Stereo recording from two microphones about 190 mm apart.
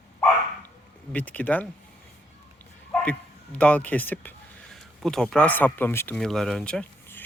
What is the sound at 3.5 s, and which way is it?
Speech, 10° left (ahead or behind).